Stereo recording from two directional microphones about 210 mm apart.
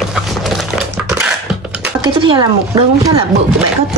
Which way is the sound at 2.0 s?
25° right (ahead or behind).